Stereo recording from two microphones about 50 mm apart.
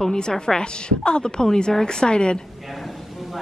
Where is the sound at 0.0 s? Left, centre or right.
Centre.